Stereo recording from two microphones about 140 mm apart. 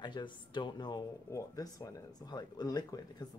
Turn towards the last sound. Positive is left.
turn(degrees=30)  # may be behind; listen again after turning